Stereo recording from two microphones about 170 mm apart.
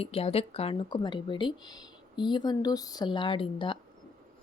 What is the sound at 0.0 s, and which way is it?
Speech, 35° left (ahead or behind).